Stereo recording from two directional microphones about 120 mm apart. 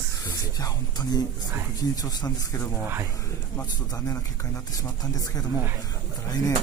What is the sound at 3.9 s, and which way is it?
Speech, 30° left (ahead or behind).